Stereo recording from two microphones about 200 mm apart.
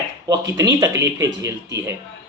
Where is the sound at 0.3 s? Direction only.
15° right (ahead or behind).